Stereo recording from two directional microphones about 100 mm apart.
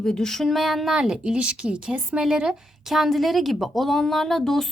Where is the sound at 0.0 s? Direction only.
5° left (ahead or behind).